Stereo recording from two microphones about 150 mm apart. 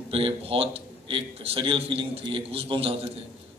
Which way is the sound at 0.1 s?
40° right (ahead or behind).